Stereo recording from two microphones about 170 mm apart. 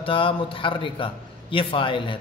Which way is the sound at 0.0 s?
30° left (ahead or behind).